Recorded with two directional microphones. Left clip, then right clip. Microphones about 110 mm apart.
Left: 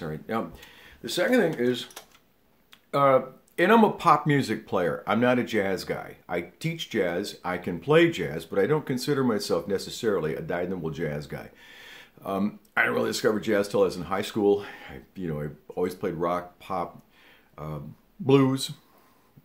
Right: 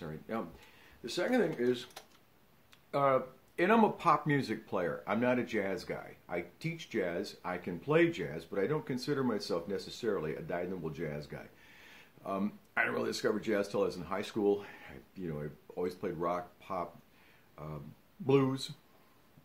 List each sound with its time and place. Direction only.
0.3 s speech: 20° left (ahead or behind)
2.9 s speech: 5° left (ahead or behind)